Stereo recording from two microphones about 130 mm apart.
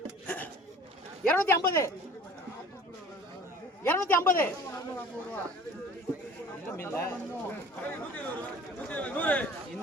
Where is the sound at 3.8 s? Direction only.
15° left (ahead or behind).